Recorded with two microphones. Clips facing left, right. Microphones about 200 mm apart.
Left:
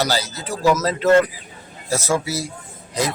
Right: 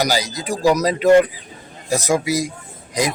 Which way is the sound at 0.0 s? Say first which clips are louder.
Right 2 dB; 15° right (ahead or behind).